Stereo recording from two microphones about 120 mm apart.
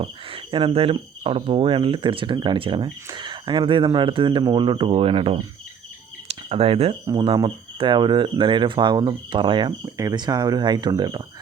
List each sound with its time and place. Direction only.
0.0 s speech: 50° right (ahead or behind)
6.2 s a sound: 55° right (ahead or behind)
7.1 s speech: 35° right (ahead or behind)
9.8 s speech: 30° right (ahead or behind)